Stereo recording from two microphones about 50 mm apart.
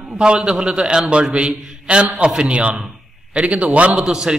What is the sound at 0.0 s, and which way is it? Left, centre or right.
A man's voice, centre.